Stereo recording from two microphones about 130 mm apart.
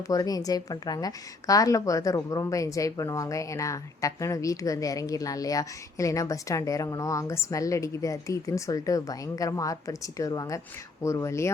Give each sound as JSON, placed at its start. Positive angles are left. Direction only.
{"t": 0.0, "sound": "a woman's voice", "side_deg": 30}